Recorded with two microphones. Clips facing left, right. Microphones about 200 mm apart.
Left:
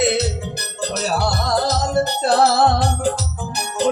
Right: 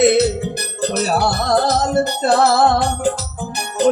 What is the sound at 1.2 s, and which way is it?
Music, 55° right (ahead or behind).